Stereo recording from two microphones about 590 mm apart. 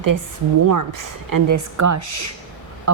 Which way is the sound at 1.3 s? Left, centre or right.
Right.